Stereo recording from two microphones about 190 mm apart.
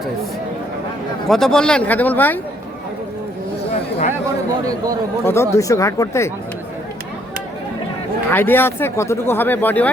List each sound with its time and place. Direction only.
1.3 s speech: centre (ahead or behind)
3.7 s a sound: 35° left (ahead or behind)
5.2 s speech: 15° left (ahead or behind)
8.3 s speech: 10° left (ahead or behind)